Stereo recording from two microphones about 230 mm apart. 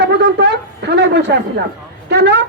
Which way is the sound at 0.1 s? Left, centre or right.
Right.